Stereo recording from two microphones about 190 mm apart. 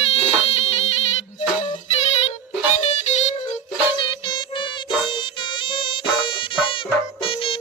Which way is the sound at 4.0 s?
25° left (ahead or behind).